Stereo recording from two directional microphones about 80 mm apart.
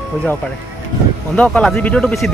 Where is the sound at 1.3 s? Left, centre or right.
Centre.